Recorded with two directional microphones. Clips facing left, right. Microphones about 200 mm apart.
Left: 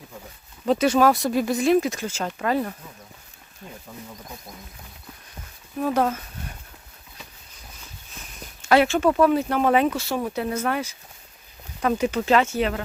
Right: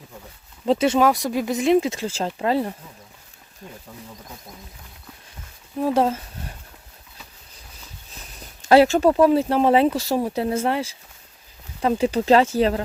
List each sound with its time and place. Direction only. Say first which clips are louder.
0.6 s speech: right 1 dB; 25° right (ahead or behind)
5.8 s speech: right 2 dB; 30° right (ahead or behind)
8.6 s speech: right 4 dB; 35° right (ahead or behind)